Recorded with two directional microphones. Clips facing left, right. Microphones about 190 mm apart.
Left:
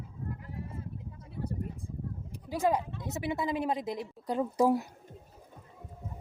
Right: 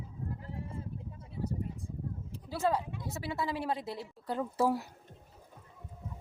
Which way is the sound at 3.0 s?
20° left (ahead or behind).